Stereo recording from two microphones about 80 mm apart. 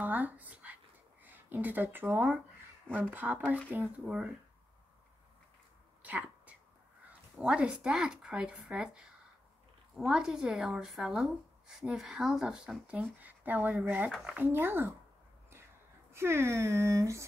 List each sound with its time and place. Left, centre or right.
0.0 s dog: right
1.2 s speech: right
6.0 s speech: centre
16.1 s speech: right